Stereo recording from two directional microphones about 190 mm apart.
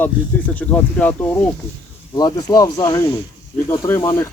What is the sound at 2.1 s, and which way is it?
Speech, 20° left (ahead or behind).